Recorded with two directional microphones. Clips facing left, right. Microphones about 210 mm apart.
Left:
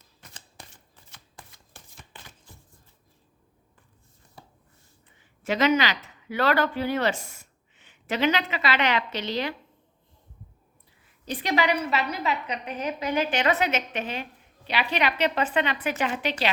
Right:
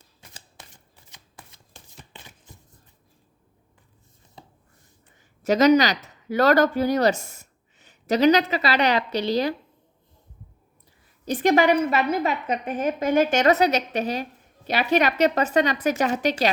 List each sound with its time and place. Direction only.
0.2 s shuffling cards: 10° right (ahead or behind)
2.1 s a sound: 20° right (ahead or behind)
4.4 s chopping: 20° right (ahead or behind)
5.4 s speech: 40° right (ahead or behind)
11.3 s a woman's voice: 45° right (ahead or behind)